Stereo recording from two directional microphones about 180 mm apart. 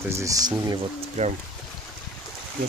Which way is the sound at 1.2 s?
40° right (ahead or behind).